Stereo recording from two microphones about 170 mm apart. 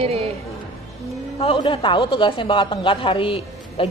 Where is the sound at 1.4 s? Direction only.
30° left (ahead or behind).